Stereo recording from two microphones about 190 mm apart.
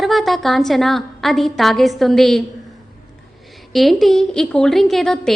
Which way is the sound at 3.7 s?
Centre (ahead or behind).